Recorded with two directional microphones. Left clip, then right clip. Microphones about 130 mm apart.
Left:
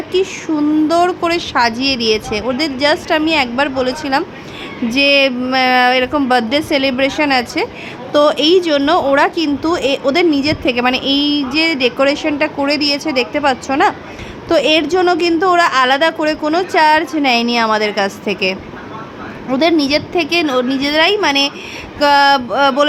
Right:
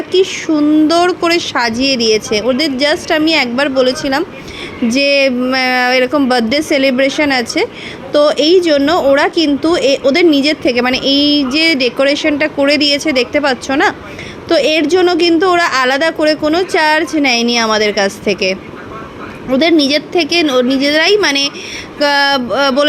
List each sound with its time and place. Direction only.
0.1 s a woman's voice: 25° right (ahead or behind)